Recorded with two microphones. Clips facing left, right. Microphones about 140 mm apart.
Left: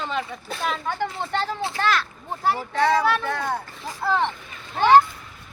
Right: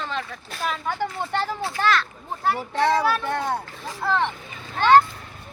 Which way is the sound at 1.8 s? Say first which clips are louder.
Right 2 dB; 5° left (ahead or behind).